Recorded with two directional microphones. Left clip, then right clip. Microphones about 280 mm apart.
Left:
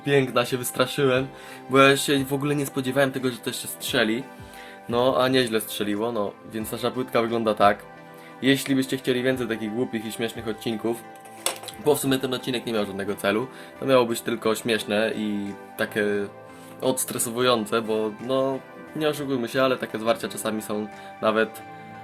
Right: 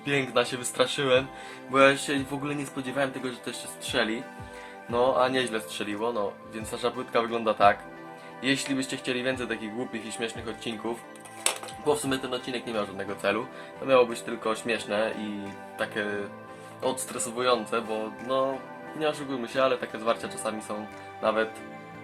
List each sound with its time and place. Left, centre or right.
0.0 s speech: centre